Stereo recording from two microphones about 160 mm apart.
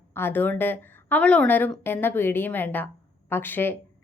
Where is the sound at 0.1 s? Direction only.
15° left (ahead or behind).